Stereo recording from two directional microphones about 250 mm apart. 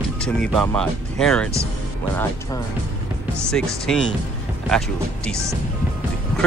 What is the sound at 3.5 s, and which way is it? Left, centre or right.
Speech, centre.